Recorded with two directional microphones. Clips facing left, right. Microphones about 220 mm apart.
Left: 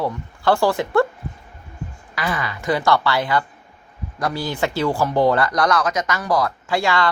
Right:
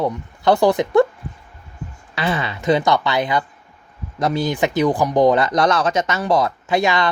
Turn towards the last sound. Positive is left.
turn(degrees=-20)  # may be behind; listen again after turning